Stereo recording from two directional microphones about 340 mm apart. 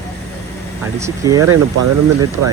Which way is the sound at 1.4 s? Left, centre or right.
Right.